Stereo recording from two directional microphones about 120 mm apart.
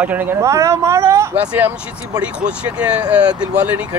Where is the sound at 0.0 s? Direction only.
15° right (ahead or behind).